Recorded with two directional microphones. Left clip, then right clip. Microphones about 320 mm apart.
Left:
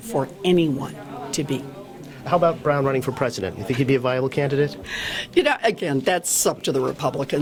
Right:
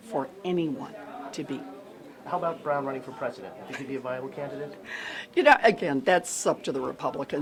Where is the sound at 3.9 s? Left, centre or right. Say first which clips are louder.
Left 11 dB; left.